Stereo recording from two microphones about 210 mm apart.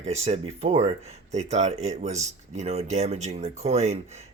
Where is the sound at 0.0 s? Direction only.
30° right (ahead or behind).